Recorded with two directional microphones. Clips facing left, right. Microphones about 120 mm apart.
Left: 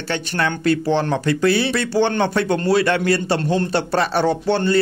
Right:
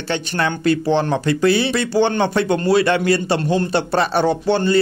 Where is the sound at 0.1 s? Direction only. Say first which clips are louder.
Right 1 dB; 20° right (ahead or behind).